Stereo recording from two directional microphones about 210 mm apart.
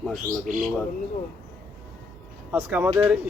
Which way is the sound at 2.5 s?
10° right (ahead or behind).